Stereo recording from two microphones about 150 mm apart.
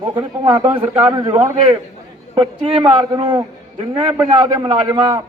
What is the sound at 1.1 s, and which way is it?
A man's voice, 30° right (ahead or behind).